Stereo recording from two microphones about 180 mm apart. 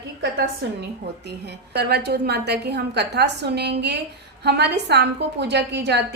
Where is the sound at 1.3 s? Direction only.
65° right (ahead or behind).